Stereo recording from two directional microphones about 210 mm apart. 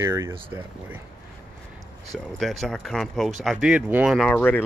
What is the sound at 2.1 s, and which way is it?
Speech, centre (ahead or behind).